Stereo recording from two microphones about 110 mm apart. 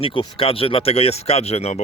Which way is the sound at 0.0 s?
55° left (ahead or behind).